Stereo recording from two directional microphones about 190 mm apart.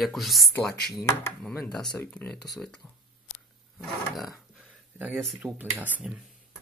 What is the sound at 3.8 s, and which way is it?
Speech, centre (ahead or behind).